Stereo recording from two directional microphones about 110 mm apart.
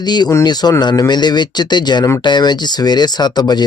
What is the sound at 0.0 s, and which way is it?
Speech, 40° left (ahead or behind).